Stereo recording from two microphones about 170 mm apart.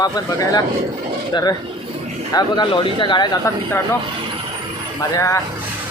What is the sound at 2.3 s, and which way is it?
Speech, 25° left (ahead or behind).